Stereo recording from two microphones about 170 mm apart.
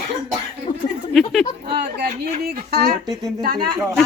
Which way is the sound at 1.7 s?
70° right (ahead or behind).